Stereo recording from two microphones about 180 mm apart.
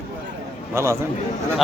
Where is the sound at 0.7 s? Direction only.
15° right (ahead or behind).